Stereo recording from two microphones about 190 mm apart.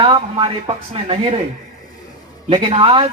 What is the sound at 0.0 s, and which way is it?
A man's voice, 25° right (ahead or behind).